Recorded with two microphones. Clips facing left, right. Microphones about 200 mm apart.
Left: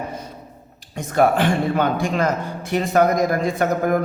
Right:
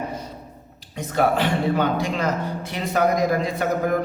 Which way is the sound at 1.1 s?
50° left (ahead or behind).